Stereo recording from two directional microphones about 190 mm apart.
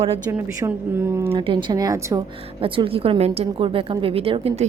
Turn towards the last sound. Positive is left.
turn(degrees=-30)  # may be behind; listen again after turning